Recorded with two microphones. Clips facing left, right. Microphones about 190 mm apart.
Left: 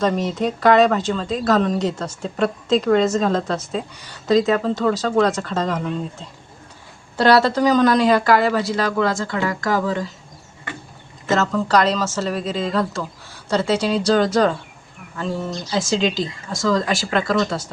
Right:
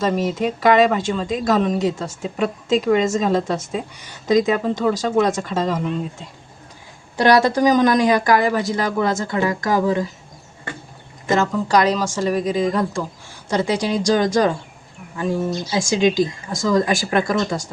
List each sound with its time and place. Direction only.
0.0 s speech: 5° right (ahead or behind)
11.3 s speech: 15° right (ahead or behind)